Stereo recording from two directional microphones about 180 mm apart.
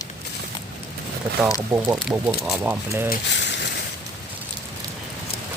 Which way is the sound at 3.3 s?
75° left (ahead or behind).